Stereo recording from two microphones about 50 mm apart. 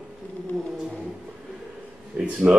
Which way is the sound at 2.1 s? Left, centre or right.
Right.